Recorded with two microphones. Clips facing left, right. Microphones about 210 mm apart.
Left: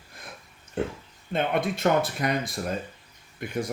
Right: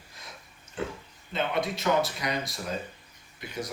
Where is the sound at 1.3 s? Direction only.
55° left (ahead or behind).